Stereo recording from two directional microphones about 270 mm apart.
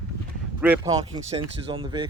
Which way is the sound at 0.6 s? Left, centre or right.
Centre.